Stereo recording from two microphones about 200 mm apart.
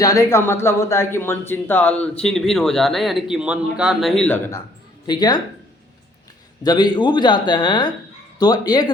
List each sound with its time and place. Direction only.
0.0 s speech: 15° left (ahead or behind)
5.0 s speech: 20° left (ahead or behind)
6.6 s speech: 20° left (ahead or behind)